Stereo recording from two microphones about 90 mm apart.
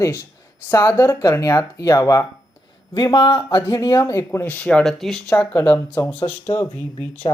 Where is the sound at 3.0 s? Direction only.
50° left (ahead or behind).